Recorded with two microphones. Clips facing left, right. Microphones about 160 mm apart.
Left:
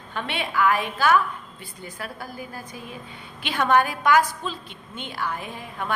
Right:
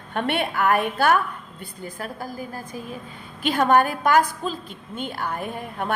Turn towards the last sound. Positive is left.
turn(degrees=-50)  # may be behind; listen again after turning